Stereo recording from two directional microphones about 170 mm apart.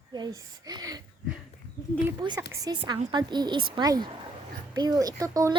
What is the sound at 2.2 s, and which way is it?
A child's voice, 25° right (ahead or behind).